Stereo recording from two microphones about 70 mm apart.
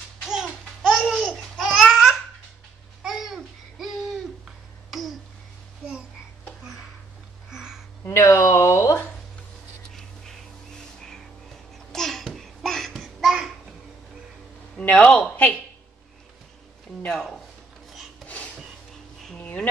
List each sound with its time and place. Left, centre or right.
0.3 s babbling: centre
0.9 s babbling: centre
1.7 s babbling: centre
7.4 s music: centre
8.0 s a sound: left
9.9 s music: centre
11.9 s a sound: centre
14.8 s a man's voice: left
18.2 s a sound: centre